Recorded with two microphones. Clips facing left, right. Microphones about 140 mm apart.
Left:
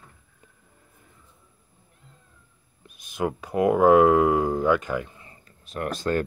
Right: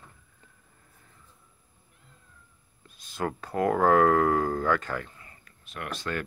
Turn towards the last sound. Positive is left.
turn(degrees=40)  # may be behind; listen again after turning